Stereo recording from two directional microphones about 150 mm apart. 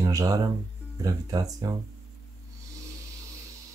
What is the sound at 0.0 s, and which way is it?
Speech, 25° right (ahead or behind).